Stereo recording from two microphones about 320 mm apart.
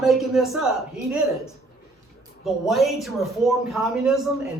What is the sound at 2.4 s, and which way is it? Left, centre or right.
A man's voice, centre.